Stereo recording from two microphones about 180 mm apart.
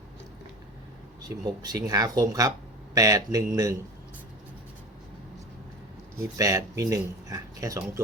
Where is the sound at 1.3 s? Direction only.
20° right (ahead or behind).